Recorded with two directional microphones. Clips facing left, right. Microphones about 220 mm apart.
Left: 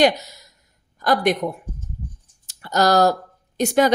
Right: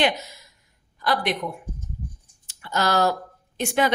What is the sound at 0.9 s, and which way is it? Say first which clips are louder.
A woman's voice: left 6 dB; 45° left (ahead or behind).